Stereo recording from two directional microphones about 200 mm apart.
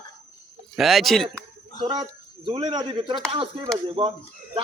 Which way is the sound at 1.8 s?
20° right (ahead or behind).